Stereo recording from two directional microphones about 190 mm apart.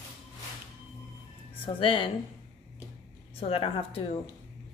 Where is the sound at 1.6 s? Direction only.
30° left (ahead or behind).